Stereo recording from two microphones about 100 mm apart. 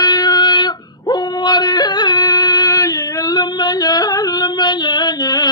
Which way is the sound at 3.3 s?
45° left (ahead or behind).